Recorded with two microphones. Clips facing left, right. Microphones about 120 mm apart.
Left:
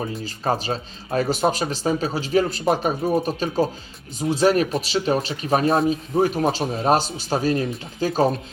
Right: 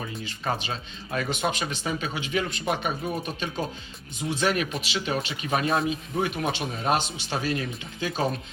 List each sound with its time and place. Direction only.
0.0 s speech: 35° left (ahead or behind)